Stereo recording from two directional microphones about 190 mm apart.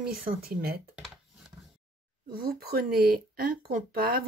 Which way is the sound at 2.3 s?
55° right (ahead or behind).